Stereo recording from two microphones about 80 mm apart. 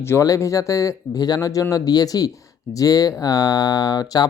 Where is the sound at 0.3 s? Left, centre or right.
Left.